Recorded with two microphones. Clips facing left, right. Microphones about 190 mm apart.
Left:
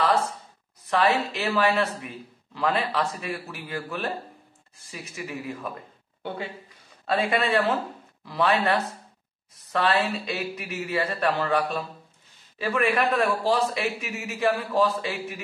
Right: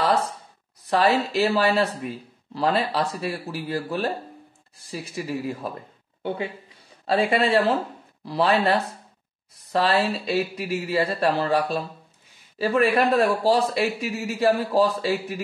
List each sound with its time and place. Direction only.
0.8 s speech: 35° right (ahead or behind)
7.2 s speech: 30° right (ahead or behind)